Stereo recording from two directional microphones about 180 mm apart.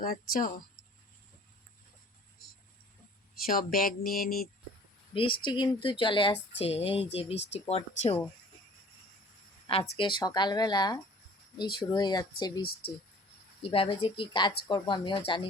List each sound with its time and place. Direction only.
0.0 s speech: 50° left (ahead or behind)
3.4 s speech: 55° left (ahead or behind)
5.1 s speech: 30° left (ahead or behind)
7.3 s speech: 80° left
7.6 s speech: 35° left (ahead or behind)
9.6 s speech: 30° left (ahead or behind)
12.6 s speech: 55° left (ahead or behind)
13.6 s speech: 30° left (ahead or behind)